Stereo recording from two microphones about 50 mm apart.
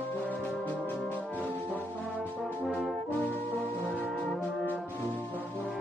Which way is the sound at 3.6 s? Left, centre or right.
Left.